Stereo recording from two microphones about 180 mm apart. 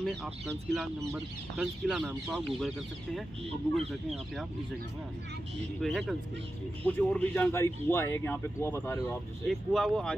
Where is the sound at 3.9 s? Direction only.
Centre (ahead or behind).